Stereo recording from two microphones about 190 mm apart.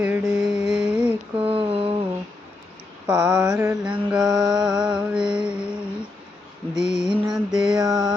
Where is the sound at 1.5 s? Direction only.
30° right (ahead or behind).